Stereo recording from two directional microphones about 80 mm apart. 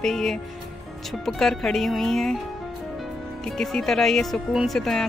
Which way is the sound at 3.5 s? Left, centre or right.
Centre.